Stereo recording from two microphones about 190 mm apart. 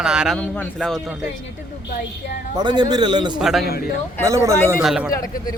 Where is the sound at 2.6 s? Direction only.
20° right (ahead or behind).